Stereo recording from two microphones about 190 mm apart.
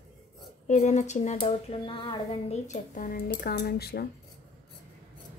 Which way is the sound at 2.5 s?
40° left (ahead or behind).